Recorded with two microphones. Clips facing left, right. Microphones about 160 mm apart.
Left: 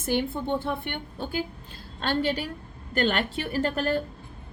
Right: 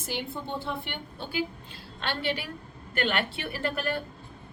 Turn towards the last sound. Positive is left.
turn(degrees=40)  # may be behind; listen again after turning